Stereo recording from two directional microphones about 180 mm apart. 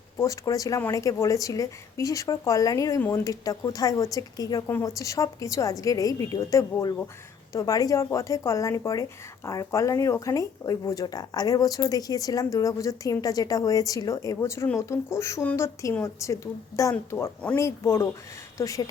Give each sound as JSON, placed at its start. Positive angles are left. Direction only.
{"t": 0.2, "sound": "speech", "side_deg": 20}